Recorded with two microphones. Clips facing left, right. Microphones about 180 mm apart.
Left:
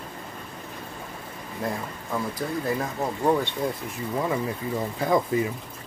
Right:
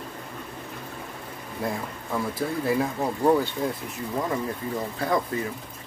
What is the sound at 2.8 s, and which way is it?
Speech, 5° right (ahead or behind).